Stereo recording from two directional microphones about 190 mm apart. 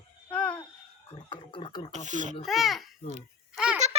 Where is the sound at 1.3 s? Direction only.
25° left (ahead or behind).